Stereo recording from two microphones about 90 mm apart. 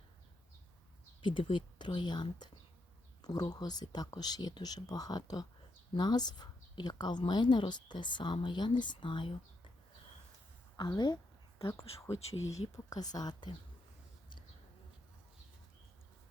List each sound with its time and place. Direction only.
1.2 s speech: 65° left (ahead or behind)
10.8 s speech: 55° left (ahead or behind)
11.6 s speech: 35° left (ahead or behind)